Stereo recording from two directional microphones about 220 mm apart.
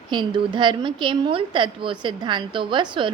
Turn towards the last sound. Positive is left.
turn(degrees=-20)  # may be behind; listen again after turning